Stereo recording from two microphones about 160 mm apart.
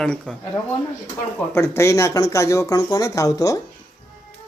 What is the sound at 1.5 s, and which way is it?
Speech, 15° left (ahead or behind).